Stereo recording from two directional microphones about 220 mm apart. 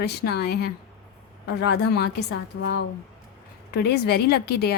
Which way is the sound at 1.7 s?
50° left (ahead or behind).